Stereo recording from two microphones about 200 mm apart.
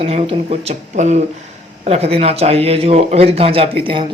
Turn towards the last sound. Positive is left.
turn(degrees=-25)  # may be behind; listen again after turning